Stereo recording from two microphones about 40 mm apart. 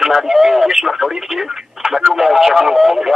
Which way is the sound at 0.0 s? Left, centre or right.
Centre.